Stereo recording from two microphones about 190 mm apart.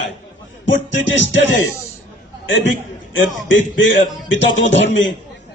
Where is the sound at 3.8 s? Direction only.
75° left (ahead or behind).